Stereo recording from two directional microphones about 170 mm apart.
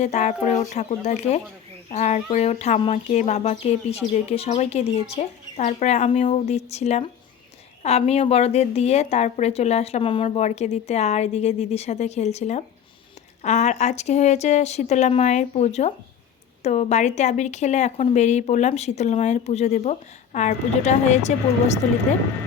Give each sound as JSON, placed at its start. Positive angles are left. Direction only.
{"t": 0.0, "sound": "speech", "side_deg": 45}